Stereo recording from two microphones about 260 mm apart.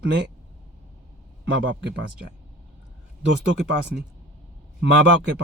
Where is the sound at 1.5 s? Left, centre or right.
Right.